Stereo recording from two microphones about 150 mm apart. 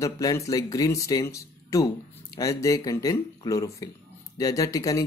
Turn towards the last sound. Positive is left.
turn(degrees=25)  # may be behind; listen again after turning